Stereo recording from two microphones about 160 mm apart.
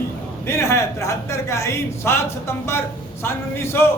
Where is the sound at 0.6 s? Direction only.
15° left (ahead or behind).